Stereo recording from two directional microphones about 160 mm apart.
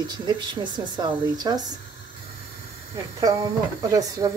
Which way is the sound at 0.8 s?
30° right (ahead or behind).